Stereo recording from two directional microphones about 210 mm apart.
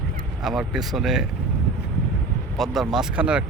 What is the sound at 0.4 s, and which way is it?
Speech, centre (ahead or behind).